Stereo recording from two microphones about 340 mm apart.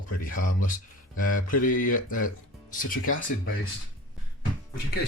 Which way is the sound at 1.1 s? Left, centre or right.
Left.